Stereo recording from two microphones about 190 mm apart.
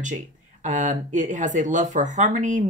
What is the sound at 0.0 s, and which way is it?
Speech, 40° right (ahead or behind).